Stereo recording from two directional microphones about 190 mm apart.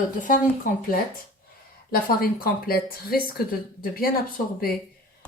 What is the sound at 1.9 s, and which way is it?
Speech, 50° left (ahead or behind).